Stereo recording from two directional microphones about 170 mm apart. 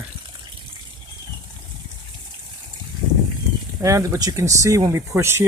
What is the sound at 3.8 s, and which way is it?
Speech, 20° right (ahead or behind).